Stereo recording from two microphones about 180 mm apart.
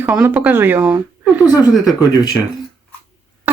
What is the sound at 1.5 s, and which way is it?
Speech, 20° left (ahead or behind).